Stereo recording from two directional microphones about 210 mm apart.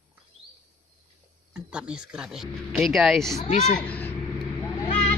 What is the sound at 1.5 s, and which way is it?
Speech, 5° right (ahead or behind).